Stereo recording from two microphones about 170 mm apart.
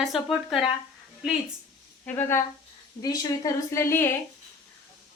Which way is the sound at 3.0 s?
20° left (ahead or behind).